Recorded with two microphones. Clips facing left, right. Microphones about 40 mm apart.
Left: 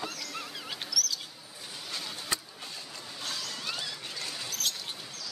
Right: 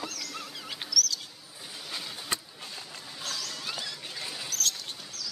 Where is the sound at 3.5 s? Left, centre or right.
Centre.